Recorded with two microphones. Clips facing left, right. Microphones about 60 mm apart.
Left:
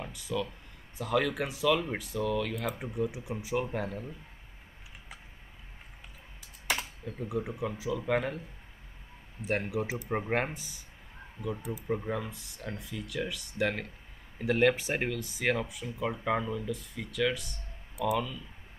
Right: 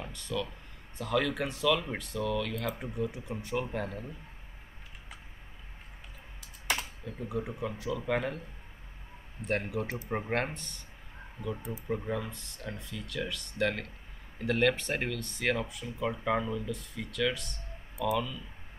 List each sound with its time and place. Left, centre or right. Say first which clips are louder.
0.0 s speech: left 1 dB; centre
6.7 s speech: even; centre
9.4 s speech: left 1 dB; centre
11.9 s speech: even; centre
17.9 s speech: left 1 dB; left